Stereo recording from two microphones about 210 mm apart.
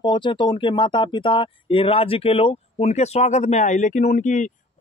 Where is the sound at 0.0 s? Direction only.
20° left (ahead or behind).